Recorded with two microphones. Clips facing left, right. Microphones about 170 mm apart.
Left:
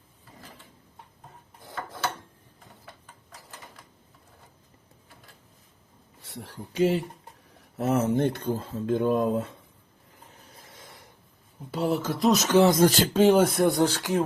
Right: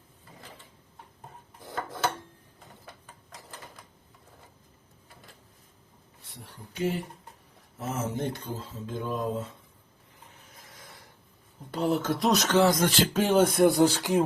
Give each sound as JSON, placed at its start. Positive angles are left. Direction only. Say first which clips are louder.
{"t": 6.2, "sound": "speech", "louder": "left 8 dB", "side_deg": 90}
{"t": 7.8, "sound": "speech", "louder": "left 8 dB", "side_deg": 65}
{"t": 10.4, "sound": "a sound", "louder": "left 2 dB", "side_deg": 30}
{"t": 11.7, "sound": "speech", "louder": "even", "side_deg": 0}
{"t": 12.5, "sound": "speech", "louder": "left 3 dB", "side_deg": 15}
{"t": 12.7, "sound": "speech", "louder": "left 5 dB", "side_deg": 40}
{"t": 13.3, "sound": "speech", "louder": "even", "side_deg": 5}
{"t": 13.8, "sound": "speech", "louder": "right 1 dB", "side_deg": -15}